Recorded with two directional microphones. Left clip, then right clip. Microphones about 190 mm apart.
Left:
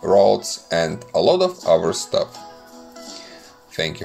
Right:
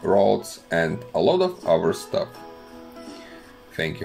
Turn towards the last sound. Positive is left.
turn(degrees=15)  # may be behind; listen again after turning